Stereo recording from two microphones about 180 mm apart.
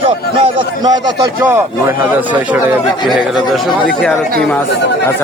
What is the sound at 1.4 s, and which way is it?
A man's voice, 10° right (ahead or behind).